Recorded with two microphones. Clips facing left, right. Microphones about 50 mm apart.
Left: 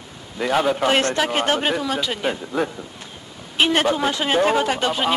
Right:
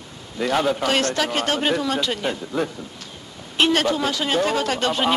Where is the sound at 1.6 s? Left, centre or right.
Centre.